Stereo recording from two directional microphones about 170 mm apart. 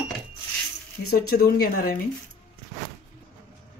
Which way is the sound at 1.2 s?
65° left (ahead or behind).